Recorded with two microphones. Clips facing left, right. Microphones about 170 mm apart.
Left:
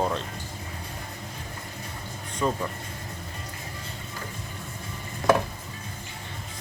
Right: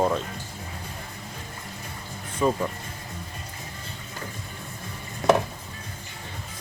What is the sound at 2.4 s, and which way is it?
Speech, 5° right (ahead or behind).